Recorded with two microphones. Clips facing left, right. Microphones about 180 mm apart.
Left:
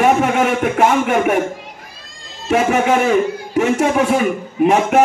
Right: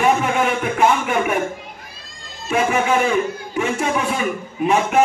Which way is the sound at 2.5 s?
45° left (ahead or behind).